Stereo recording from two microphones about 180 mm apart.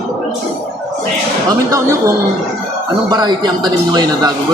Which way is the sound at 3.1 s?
25° right (ahead or behind).